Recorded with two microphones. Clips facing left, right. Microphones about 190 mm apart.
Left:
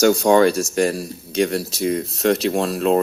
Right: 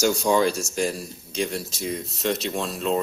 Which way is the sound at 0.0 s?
60° left (ahead or behind).